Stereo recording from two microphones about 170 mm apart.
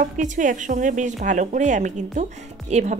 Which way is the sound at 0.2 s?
50° right (ahead or behind).